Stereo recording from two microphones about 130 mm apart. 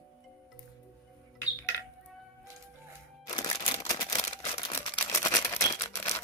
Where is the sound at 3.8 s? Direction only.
30° left (ahead or behind).